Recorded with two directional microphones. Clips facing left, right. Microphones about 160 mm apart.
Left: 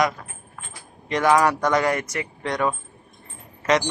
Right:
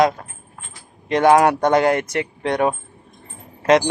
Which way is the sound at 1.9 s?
60° right (ahead or behind).